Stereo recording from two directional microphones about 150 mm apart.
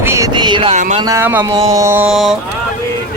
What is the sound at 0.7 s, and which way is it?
Speech, 50° right (ahead or behind).